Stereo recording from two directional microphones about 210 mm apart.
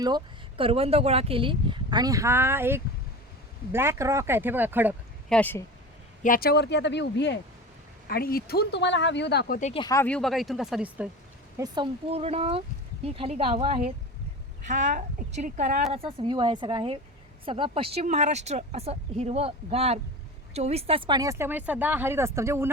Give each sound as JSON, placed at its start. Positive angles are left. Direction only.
{"t": 0.0, "sound": "speech", "side_deg": -25}
{"t": 5.3, "sound": "speech", "side_deg": 10}
{"t": 6.2, "sound": "speech", "side_deg": 45}
{"t": 9.6, "sound": "speech", "side_deg": 35}
{"t": 9.8, "sound": "speech", "side_deg": 10}
{"t": 11.5, "sound": "speech", "side_deg": -20}
{"t": 16.0, "sound": "speech", "side_deg": -20}